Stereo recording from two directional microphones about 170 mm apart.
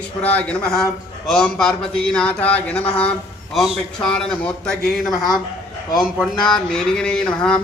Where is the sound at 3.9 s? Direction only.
5° left (ahead or behind).